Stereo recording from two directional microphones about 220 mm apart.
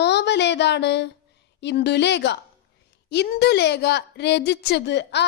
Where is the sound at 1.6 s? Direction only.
50° left (ahead or behind).